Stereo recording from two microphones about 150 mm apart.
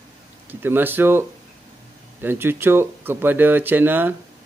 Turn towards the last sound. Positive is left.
turn(degrees=-15)  # may be behind; listen again after turning